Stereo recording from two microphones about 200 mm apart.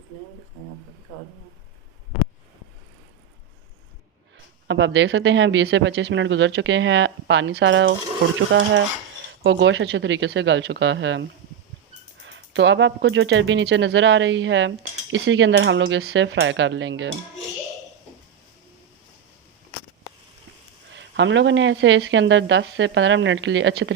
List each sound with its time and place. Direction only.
4.7 s speech: 65° right (ahead or behind)
20.9 s speech: 65° right (ahead or behind)